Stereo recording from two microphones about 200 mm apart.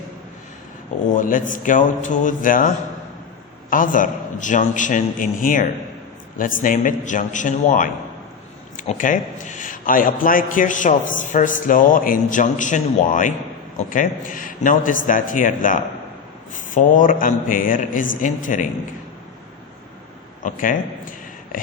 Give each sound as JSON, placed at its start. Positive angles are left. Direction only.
{"t": 1.1, "sound": "a man's voice", "side_deg": 40}
{"t": 20.4, "sound": "a man's voice", "side_deg": 40}
{"t": 21.5, "sound": "a sound", "side_deg": 45}